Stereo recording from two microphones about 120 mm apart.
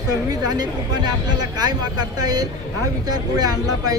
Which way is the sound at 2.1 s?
35° right (ahead or behind).